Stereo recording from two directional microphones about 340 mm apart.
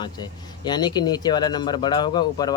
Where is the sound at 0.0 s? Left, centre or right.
Centre.